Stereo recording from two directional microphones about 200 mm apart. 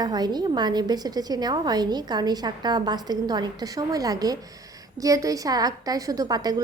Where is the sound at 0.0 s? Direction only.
20° right (ahead or behind).